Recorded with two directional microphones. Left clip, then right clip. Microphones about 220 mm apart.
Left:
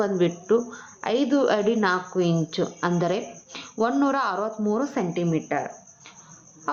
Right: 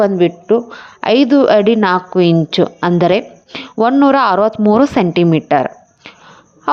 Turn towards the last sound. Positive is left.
turn(degrees=-50)  # may be behind; listen again after turning